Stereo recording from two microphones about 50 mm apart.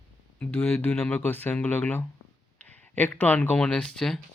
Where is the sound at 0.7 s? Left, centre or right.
Left.